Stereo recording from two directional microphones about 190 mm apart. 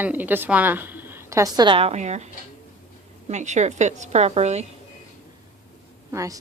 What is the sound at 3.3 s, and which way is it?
Speech, 35° right (ahead or behind).